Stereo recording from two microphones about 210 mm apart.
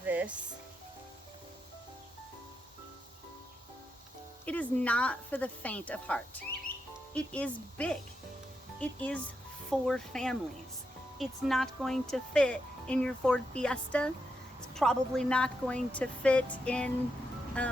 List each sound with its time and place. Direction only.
0.0 s music: 10° right (ahead or behind)
4.4 s a woman's voice: 5° left (ahead or behind)